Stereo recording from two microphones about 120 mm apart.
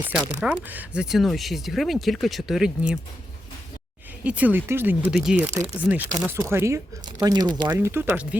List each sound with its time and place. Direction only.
0.3 s speech: 10° right (ahead or behind)
4.2 s speech: 15° right (ahead or behind)
5.1 s speech: 5° right (ahead or behind)
5.4 s speech: 20° right (ahead or behind)
7.0 s speech: 35° right (ahead or behind)
7.7 s speech: 20° right (ahead or behind)